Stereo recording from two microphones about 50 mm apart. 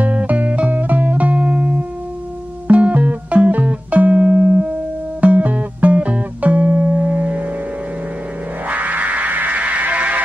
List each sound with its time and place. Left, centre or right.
0.0 s music: right
8.6 s music: right